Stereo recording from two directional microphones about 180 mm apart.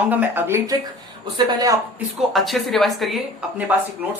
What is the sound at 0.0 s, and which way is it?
Speech, 10° right (ahead or behind).